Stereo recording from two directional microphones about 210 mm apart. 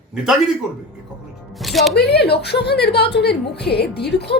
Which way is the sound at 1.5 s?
Centre (ahead or behind).